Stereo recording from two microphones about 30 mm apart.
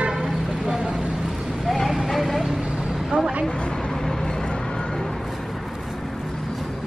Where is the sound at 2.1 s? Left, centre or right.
Centre.